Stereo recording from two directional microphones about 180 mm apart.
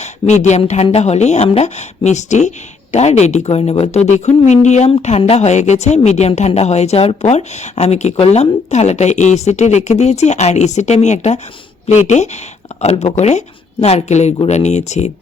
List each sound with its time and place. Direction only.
0.0 s a woman's voice: 40° left (ahead or behind)